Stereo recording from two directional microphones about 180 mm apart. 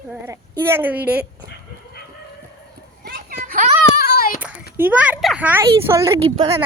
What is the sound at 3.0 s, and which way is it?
Children playing, 55° right (ahead or behind).